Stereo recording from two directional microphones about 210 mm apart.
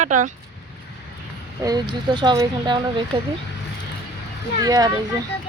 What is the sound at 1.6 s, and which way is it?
Speech, 20° right (ahead or behind).